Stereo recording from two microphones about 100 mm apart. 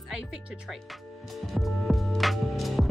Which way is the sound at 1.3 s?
Centre (ahead or behind).